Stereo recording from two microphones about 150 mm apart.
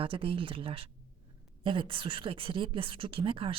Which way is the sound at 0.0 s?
35° right (ahead or behind).